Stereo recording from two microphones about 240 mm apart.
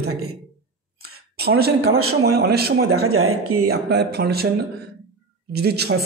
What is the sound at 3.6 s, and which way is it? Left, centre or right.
Speech, right.